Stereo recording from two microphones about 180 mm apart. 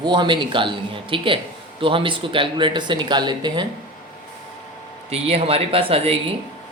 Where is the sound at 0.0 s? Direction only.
25° right (ahead or behind).